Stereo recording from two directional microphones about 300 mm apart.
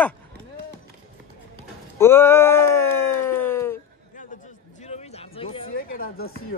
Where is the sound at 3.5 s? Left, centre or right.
Centre.